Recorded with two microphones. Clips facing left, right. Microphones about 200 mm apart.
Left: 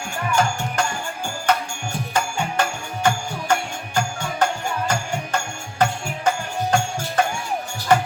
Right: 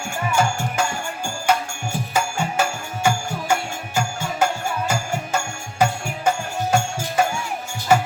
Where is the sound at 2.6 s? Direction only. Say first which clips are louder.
Even; 5° right (ahead or behind).